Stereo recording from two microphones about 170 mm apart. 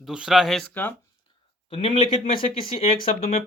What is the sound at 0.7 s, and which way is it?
Speech, 10° left (ahead or behind).